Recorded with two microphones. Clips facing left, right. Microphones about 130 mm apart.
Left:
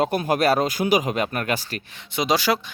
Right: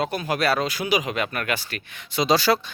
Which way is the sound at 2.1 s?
15° left (ahead or behind).